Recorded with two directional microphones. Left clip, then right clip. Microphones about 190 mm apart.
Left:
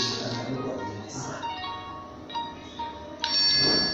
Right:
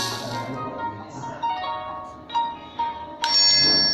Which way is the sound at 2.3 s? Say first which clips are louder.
Right 9 dB; 40° right (ahead or behind).